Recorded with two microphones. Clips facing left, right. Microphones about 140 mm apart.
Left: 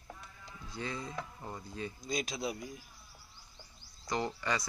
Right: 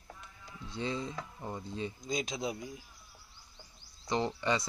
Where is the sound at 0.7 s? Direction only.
25° right (ahead or behind).